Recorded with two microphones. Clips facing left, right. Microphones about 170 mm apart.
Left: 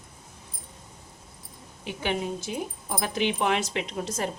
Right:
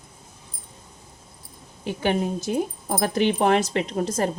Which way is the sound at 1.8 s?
45° right (ahead or behind).